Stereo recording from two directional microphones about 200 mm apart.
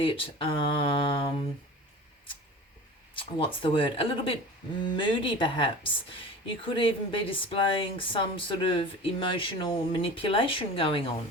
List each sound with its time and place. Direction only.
0.0 s speech: 25° left (ahead or behind)
3.2 s speech: 25° left (ahead or behind)